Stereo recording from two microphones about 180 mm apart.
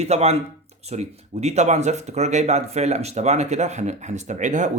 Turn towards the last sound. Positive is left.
turn(degrees=-40)  # may be behind; listen again after turning